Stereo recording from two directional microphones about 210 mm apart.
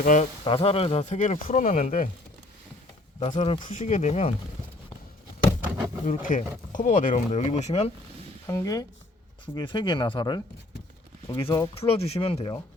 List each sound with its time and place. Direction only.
0.0 s speech: 35° left (ahead or behind)
0.4 s speech: 25° left (ahead or behind)
3.2 s speech: 30° left (ahead or behind)
6.1 s speech: 40° left (ahead or behind)
8.4 s speech: 15° left (ahead or behind)
11.4 s speech: 15° left (ahead or behind)
11.7 s speech: 25° left (ahead or behind)